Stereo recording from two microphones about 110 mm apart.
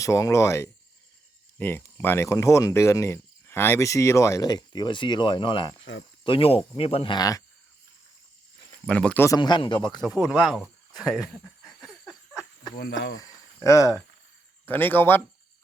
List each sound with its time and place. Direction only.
0.0 s speech: 30° left (ahead or behind); by 7.2 s 55° left (ahead or behind)
7.2 s speech: 30° left (ahead or behind)
8.9 s speech: 10° left (ahead or behind)
9.4 s speech: 45° left (ahead or behind)
10.0 s speech: centre (ahead or behind)
11.6 s a sound: centre (ahead or behind)
13.1 s a sound: 30° left (ahead or behind)
14.7 s speech: 20° left (ahead or behind)